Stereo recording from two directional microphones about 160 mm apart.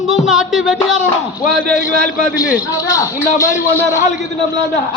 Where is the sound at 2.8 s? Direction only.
20° left (ahead or behind).